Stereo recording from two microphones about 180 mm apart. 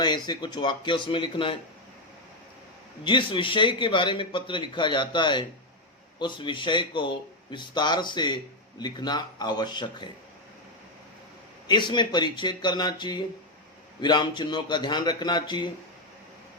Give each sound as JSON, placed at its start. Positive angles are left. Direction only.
{"t": 0.0, "sound": "a man's voice", "side_deg": 25}
{"t": 3.0, "sound": "a man's voice", "side_deg": 25}
{"t": 11.7, "sound": "a man's voice", "side_deg": 25}